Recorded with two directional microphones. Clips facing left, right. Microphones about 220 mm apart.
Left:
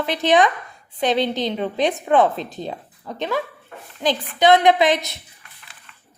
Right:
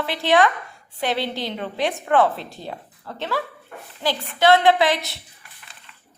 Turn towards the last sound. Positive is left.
turn(degrees=20)  # may be behind; listen again after turning